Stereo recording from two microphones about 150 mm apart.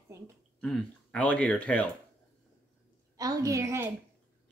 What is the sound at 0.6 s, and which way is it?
Speech, 5° left (ahead or behind).